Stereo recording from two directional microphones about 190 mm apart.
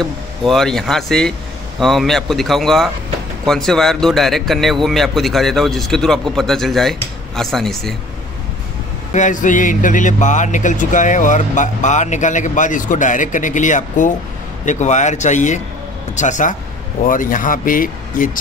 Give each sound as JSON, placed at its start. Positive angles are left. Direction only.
{"t": 0.0, "sound": "speech", "side_deg": 0}
{"t": 9.1, "sound": "speech", "side_deg": 40}